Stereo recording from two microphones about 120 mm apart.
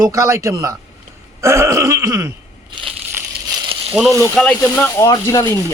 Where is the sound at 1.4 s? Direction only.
25° right (ahead or behind).